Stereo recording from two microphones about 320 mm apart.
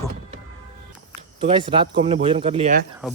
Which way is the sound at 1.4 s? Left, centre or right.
Centre.